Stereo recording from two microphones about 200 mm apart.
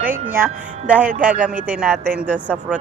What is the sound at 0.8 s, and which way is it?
A woman's voice, 5° right (ahead or behind).